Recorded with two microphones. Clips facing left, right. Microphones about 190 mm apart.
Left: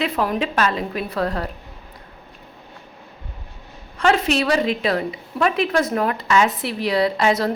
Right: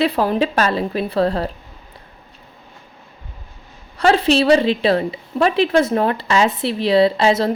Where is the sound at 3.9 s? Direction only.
35° right (ahead or behind).